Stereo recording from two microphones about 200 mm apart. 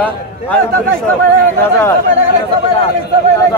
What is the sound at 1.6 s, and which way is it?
Speech, 15° left (ahead or behind).